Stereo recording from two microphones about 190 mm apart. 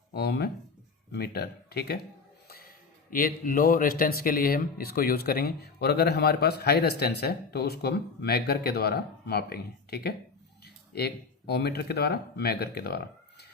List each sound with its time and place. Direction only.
0.1 s speech: 55° left (ahead or behind)